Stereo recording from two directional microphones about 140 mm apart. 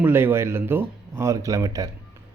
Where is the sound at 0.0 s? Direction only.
15° right (ahead or behind).